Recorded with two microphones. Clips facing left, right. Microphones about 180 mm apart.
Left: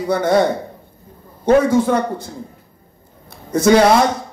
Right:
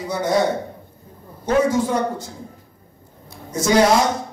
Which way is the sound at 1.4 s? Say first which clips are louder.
Left 5 dB; 60° left (ahead or behind).